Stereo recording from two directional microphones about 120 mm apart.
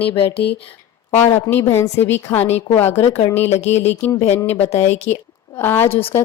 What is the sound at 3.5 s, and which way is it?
Speech, 65° left (ahead or behind).